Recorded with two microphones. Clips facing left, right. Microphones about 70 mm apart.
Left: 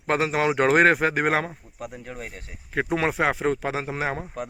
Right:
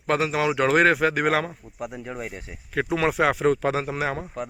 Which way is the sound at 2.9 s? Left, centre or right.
Left.